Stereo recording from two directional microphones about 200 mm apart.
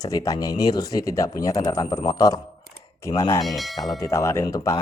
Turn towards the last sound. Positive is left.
turn(degrees=15)  # may be behind; listen again after turning